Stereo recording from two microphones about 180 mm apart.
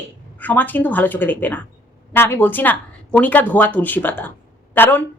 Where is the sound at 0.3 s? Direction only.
10° left (ahead or behind).